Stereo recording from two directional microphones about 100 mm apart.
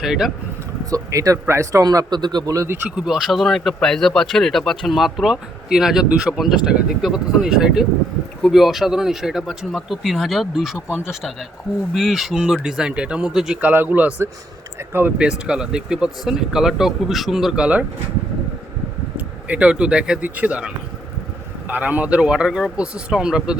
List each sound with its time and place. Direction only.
0.0 s speech: 5° right (ahead or behind)
0.9 s speech: 35° right (ahead or behind)
2.8 s speech: 5° right (ahead or behind)
15.3 s speech: 10° right (ahead or behind)
19.1 s speech: 15° right (ahead or behind)